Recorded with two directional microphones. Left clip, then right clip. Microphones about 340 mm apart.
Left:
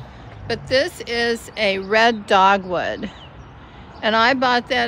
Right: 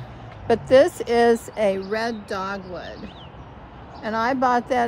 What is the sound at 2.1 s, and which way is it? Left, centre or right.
Speech, centre.